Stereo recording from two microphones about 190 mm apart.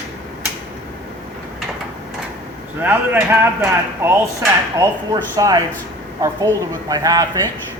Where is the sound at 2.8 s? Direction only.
10° right (ahead or behind).